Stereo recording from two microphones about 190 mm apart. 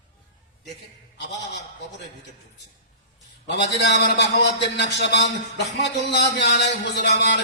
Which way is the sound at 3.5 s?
65° left (ahead or behind).